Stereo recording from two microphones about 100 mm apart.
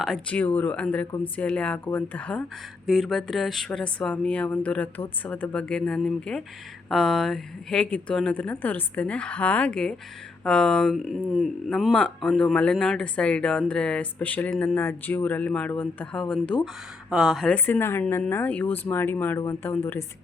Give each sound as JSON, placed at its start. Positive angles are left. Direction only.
{"t": 0.3, "sound": "speech", "side_deg": 15}
{"t": 2.8, "sound": "speech", "side_deg": 5}
{"t": 14.8, "sound": "speech", "side_deg": 20}
{"t": 17.1, "sound": "speech", "side_deg": 0}
{"t": 17.5, "sound": "speech", "side_deg": 20}